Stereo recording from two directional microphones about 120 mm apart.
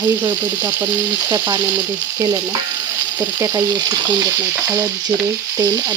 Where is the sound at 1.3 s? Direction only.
35° right (ahead or behind).